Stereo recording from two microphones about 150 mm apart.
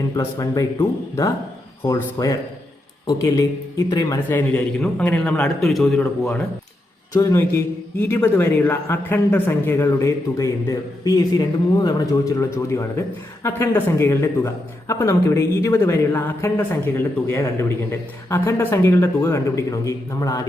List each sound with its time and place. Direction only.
0.2 s a man's voice: 20° left (ahead or behind); by 6.0 s centre (ahead or behind)
6.0 s a man's voice: 10° left (ahead or behind)
7.1 s a man's voice: 20° left (ahead or behind)